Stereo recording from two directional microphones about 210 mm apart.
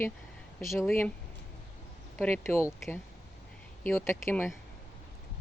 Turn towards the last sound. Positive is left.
turn(degrees=10)  # may be behind; listen again after turning